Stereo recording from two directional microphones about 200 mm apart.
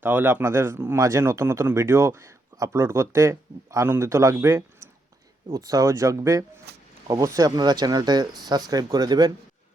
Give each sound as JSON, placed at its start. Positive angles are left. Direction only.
{"t": 0.0, "sound": "speech", "side_deg": -10}